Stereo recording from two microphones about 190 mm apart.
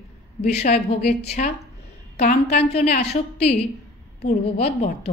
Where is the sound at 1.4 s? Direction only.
40° left (ahead or behind).